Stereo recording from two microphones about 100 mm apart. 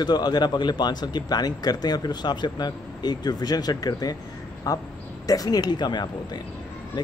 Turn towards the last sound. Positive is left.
turn(degrees=50)  # may be behind; listen again after turning